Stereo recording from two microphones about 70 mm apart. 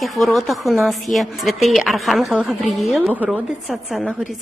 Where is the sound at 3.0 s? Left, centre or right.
Right.